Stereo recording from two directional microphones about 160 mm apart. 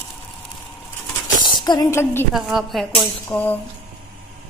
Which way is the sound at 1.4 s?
25° left (ahead or behind).